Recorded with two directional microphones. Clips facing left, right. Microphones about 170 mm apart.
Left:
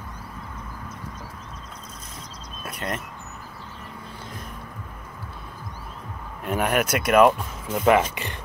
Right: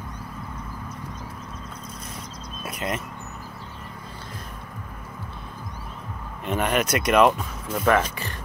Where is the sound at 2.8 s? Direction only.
5° right (ahead or behind).